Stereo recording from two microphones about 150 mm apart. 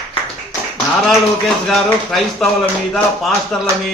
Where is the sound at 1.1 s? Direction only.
Centre (ahead or behind).